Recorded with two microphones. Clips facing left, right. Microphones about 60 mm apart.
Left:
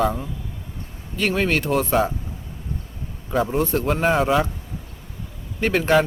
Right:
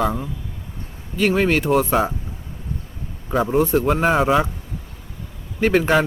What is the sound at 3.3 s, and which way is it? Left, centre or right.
Speech, centre.